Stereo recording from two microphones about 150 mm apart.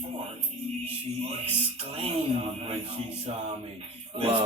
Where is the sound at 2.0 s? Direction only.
40° right (ahead or behind).